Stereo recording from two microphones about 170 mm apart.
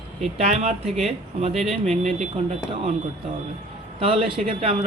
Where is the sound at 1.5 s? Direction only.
Centre (ahead or behind).